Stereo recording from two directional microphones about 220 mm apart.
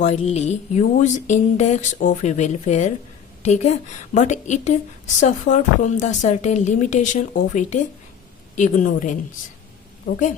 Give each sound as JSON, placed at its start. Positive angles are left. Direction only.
{"t": 0.0, "sound": "speech", "side_deg": 30}